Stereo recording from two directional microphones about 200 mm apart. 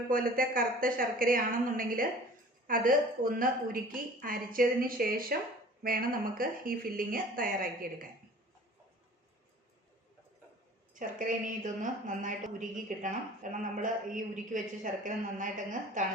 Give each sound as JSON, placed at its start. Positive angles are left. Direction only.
{"t": 0.1, "sound": "a woman's voice", "side_deg": -45}
{"t": 11.0, "sound": "speech", "side_deg": -40}